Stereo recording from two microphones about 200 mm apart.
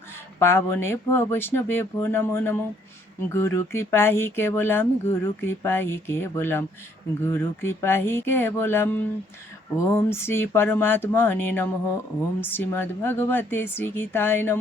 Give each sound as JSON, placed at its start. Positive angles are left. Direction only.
{"t": 0.3, "sound": "speech", "side_deg": 10}